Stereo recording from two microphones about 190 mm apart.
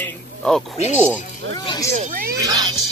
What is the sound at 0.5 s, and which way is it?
Speech, 5° left (ahead or behind).